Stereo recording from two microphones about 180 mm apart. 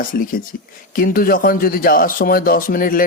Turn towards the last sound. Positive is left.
turn(degrees=50)  # may be behind; listen again after turning